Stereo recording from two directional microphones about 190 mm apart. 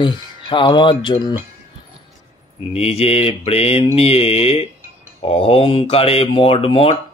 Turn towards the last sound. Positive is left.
turn(degrees=30)  # may be behind; listen again after turning